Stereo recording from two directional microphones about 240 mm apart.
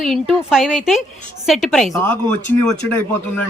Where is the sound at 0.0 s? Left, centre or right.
Centre.